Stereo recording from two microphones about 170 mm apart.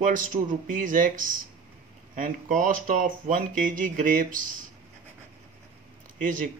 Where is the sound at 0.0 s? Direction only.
50° right (ahead or behind).